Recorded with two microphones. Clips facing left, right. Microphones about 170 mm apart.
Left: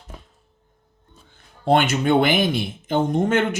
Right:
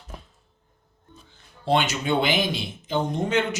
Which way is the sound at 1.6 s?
55° left (ahead or behind).